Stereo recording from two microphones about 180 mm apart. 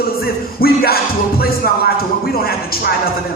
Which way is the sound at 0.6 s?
55° left (ahead or behind).